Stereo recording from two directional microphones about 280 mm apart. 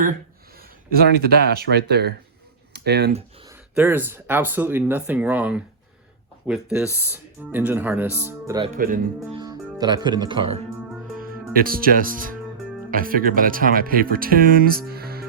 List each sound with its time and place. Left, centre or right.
0.9 s speech: right
3.8 s speech: centre
8.7 s speech: right
9.4 s speech: centre
11.2 s speech: right